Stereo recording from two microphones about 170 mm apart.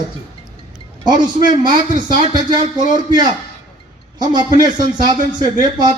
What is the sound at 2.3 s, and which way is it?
A man's voice, 25° right (ahead or behind).